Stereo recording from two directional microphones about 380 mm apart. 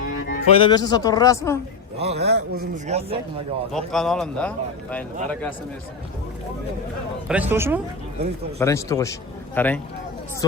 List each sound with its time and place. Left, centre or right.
0.0 s music: left
0.6 s speech: centre
2.0 s a man's voice: right
3.7 s speech: centre
7.3 s speech: centre
8.5 s speech: centre